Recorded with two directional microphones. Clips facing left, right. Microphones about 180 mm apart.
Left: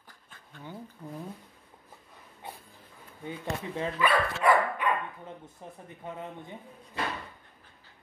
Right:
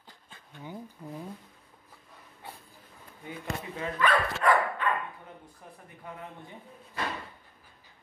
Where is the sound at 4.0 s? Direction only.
10° left (ahead or behind).